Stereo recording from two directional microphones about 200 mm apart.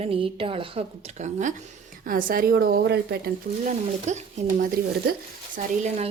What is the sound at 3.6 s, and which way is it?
Speech, 35° right (ahead or behind).